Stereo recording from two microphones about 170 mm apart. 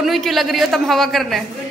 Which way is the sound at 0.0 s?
Centre (ahead or behind).